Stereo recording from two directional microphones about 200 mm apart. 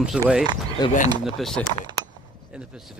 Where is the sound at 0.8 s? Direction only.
20° left (ahead or behind).